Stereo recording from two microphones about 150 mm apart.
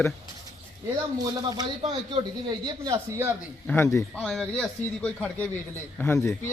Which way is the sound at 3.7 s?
15° left (ahead or behind).